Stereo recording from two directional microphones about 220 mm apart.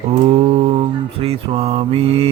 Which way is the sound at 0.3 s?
25° right (ahead or behind).